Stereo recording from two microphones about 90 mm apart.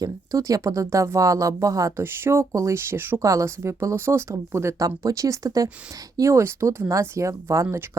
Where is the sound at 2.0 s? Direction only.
25° right (ahead or behind).